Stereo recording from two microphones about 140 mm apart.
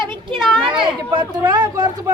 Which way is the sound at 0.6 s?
35° right (ahead or behind).